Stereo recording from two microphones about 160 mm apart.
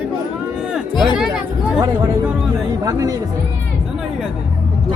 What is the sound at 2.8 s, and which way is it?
Speech, 20° right (ahead or behind).